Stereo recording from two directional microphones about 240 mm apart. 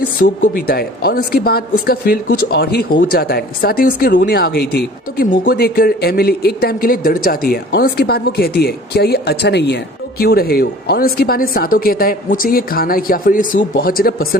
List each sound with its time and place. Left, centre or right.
0.2 s speech: left